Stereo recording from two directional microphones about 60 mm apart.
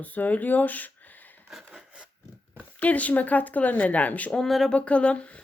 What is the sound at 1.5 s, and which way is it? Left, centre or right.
Speech, centre.